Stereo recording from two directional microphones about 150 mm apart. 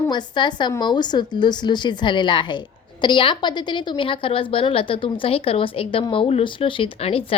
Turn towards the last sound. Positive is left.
turn(degrees=40)  # may be behind; listen again after turning